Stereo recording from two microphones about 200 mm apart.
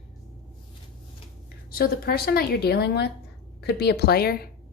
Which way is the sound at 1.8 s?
50° left (ahead or behind).